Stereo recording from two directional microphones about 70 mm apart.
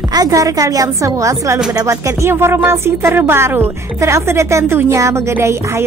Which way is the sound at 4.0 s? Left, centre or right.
Right.